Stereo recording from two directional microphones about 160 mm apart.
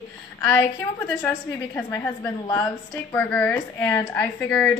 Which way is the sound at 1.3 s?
15° left (ahead or behind).